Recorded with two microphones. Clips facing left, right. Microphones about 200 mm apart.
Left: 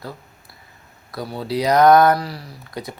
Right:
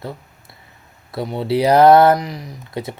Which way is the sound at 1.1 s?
25° right (ahead or behind).